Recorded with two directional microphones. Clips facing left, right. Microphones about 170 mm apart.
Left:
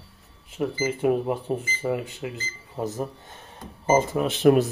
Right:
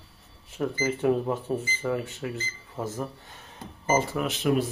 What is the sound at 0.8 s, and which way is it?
Speech, 15° left (ahead or behind).